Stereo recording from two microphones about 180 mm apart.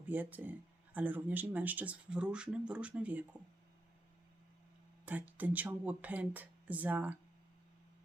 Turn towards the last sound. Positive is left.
turn(degrees=-10)  # may be behind; listen again after turning